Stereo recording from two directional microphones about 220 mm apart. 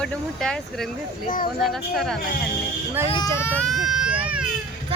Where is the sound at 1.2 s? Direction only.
40° left (ahead or behind).